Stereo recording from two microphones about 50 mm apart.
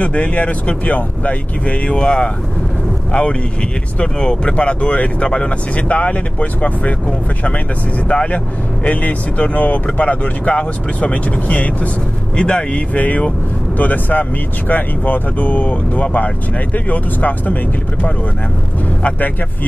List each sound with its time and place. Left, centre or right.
0.0 s speech: left
12.4 s speech: centre
19.0 s speech: left